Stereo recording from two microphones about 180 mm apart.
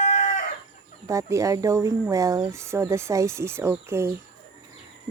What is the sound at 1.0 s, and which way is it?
Speech, 15° right (ahead or behind).